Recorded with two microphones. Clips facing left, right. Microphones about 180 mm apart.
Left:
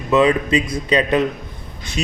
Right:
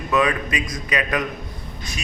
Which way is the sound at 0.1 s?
25° left (ahead or behind).